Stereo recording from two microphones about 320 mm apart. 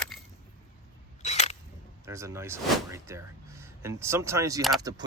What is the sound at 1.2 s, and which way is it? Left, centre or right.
Single-lens reflex camera, left.